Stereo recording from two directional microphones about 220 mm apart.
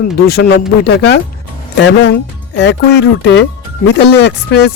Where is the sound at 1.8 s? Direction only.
55° left (ahead or behind).